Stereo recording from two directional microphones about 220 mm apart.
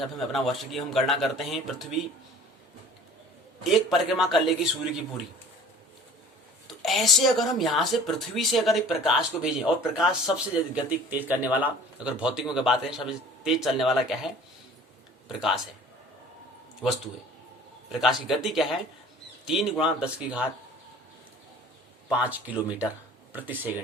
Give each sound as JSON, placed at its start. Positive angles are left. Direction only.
{"t": 0.2, "sound": "speech", "side_deg": 0}
{"t": 3.6, "sound": "speech", "side_deg": 0}
{"t": 6.7, "sound": "speech", "side_deg": 0}
{"t": 18.0, "sound": "speech", "side_deg": 0}
{"t": 22.1, "sound": "speech", "side_deg": -5}